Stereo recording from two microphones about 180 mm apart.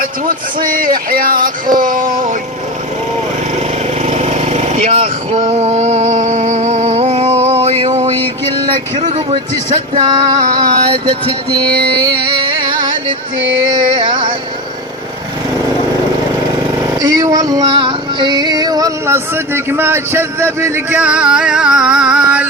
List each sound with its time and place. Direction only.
0.6 s music: 50° right (ahead or behind)
4.0 s vehicle: 40° right (ahead or behind)
9.1 s speech: 35° right (ahead or behind)
10.1 s music: 20° right (ahead or behind)
12.0 s music: 25° right (ahead or behind)
16.8 s female singing: 20° right (ahead or behind)